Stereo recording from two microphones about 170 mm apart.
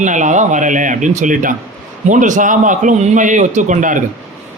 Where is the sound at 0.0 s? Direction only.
45° right (ahead or behind).